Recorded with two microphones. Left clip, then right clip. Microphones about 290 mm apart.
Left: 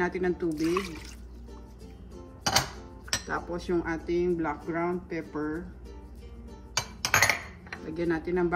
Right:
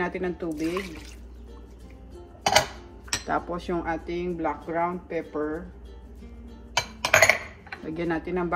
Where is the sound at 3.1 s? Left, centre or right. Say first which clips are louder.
Right 4 dB; centre.